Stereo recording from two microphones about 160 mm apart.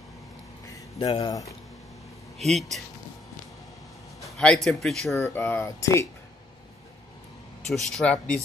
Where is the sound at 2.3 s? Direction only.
Centre (ahead or behind).